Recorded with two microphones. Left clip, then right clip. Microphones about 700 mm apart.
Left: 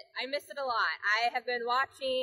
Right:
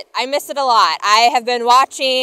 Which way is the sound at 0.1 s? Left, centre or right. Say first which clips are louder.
Right 17 dB; right.